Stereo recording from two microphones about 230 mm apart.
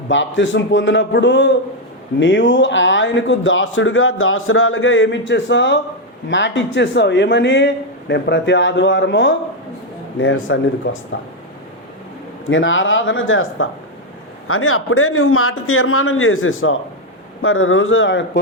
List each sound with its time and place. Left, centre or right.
0.1 s a man's voice: left
12.5 s a man's voice: left